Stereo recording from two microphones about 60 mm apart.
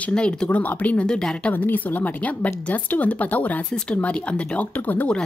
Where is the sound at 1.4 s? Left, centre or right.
Left.